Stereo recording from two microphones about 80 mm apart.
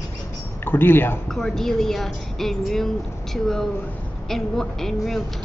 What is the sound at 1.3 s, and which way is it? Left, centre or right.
A woman's voice, centre.